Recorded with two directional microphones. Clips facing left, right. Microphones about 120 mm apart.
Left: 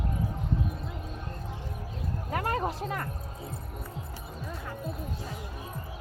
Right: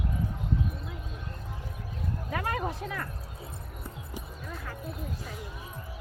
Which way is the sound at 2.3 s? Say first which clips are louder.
Left 2 dB; 40° left (ahead or behind).